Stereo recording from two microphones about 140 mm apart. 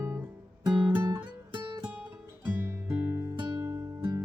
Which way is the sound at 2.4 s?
15° right (ahead or behind).